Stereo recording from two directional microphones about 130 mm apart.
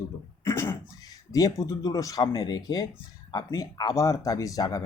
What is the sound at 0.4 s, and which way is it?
Speech, 20° left (ahead or behind).